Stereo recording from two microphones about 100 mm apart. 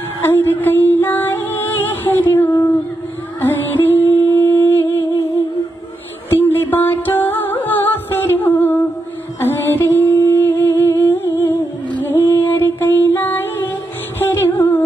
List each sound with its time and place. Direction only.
0.2 s music: 20° left (ahead or behind)
4.4 s humming: 20° left (ahead or behind)
6.4 s music: 20° left (ahead or behind)
9.4 s humming: 25° left (ahead or behind)
14.2 s music: 20° left (ahead or behind)